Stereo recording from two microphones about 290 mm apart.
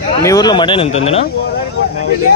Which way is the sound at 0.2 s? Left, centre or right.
Centre.